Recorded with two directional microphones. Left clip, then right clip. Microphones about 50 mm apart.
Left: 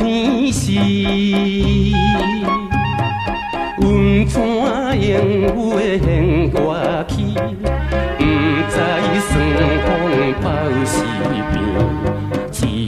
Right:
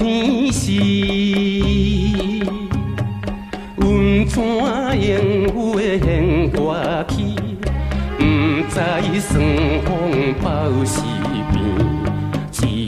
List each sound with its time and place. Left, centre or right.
0.0 s music: right
3.8 s music: right
8.2 s music: right